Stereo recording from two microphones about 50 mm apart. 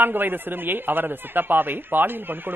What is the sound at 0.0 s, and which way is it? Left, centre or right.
A man's voice, right.